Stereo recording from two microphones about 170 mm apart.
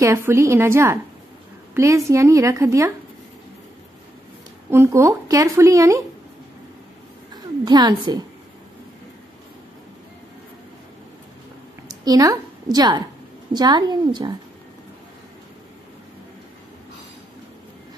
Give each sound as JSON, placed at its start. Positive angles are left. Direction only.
{"t": 0.0, "sound": "speech", "side_deg": -15}
{"t": 4.6, "sound": "speech", "side_deg": -15}
{"t": 7.6, "sound": "a woman's voice", "side_deg": -25}
{"t": 11.9, "sound": "a woman's voice", "side_deg": -25}